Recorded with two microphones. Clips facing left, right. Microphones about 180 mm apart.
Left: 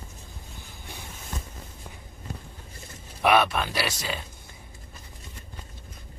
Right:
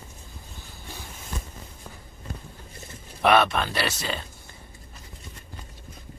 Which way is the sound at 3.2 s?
10° left (ahead or behind).